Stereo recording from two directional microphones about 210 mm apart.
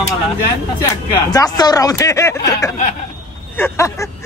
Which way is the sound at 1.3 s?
20° left (ahead or behind).